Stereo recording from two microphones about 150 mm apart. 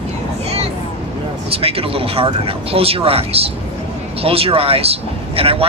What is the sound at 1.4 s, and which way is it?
A man's voice, 40° right (ahead or behind).